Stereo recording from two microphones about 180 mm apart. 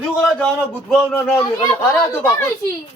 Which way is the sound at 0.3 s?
5° left (ahead or behind).